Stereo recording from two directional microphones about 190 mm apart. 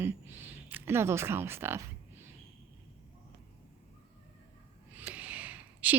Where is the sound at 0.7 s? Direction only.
15° right (ahead or behind).